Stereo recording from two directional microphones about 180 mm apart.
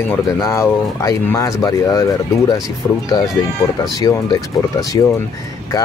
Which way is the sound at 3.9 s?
20° left (ahead or behind).